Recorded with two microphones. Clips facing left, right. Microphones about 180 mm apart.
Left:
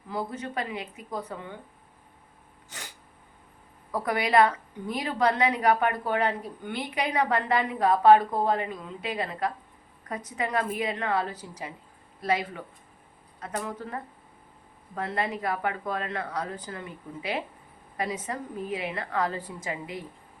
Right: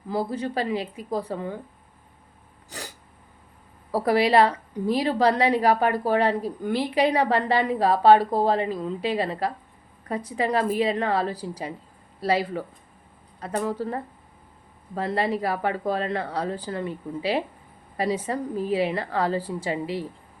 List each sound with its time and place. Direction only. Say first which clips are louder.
0.1 s a woman's voice: right 6 dB; 35° right (ahead or behind)
2.6 s a sound: right 7 dB; 35° right (ahead or behind)
3.9 s a woman's voice: right 4 dB; 30° right (ahead or behind)
13.7 s a woman's voice: right 7 dB; 35° right (ahead or behind)